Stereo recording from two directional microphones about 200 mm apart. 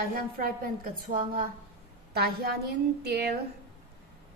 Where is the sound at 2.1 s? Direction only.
55° right (ahead or behind).